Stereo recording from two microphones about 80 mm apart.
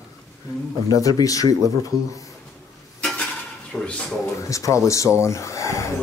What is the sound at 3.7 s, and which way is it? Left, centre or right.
Speech, centre.